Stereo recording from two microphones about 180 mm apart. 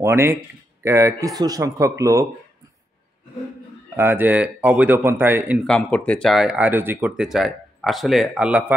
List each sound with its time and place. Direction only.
0.0 s a man's voice: 15° right (ahead or behind)
3.9 s a man's voice: 15° right (ahead or behind)
5.6 s speech: 5° left (ahead or behind)